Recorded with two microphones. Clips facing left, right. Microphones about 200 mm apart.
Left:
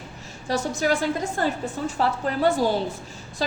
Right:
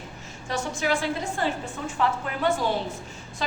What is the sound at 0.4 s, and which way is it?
A woman's voice, 35° left (ahead or behind).